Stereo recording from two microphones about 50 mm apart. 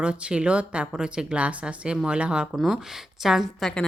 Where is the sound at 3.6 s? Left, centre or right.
Centre.